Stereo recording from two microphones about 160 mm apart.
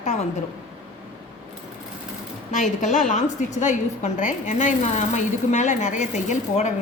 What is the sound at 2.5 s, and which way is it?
A woman's voice, 50° left (ahead or behind).